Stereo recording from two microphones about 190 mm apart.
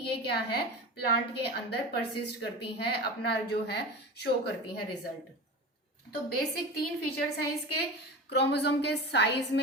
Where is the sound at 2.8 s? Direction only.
60° left (ahead or behind).